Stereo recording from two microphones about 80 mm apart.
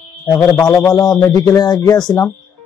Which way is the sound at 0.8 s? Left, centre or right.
Left.